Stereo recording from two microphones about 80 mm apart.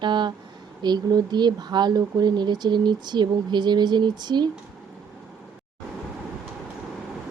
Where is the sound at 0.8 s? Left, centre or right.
Right.